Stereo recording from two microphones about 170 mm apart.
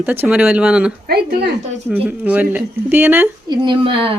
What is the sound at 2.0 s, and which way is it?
A woman's voice, 10° right (ahead or behind).